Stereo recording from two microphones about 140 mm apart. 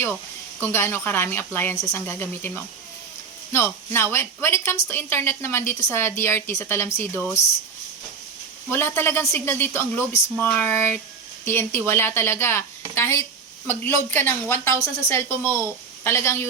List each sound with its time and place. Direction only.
0.6 s a woman's voice: 15° left (ahead or behind)
8.7 s a woman's voice: 15° left (ahead or behind)